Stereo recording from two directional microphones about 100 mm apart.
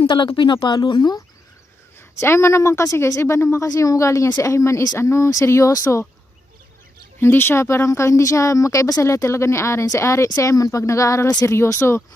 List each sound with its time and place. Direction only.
0.1 s speech: 50° left (ahead or behind)
2.0 s speech: 25° left (ahead or behind)
7.2 s speech: 25° left (ahead or behind)